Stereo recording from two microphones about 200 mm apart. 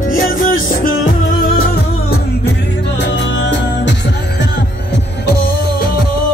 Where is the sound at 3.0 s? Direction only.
60° left (ahead or behind).